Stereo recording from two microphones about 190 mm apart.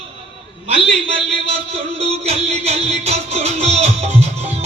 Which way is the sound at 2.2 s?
35° right (ahead or behind).